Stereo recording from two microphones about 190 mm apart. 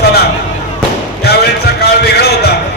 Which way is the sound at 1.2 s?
60° left (ahead or behind).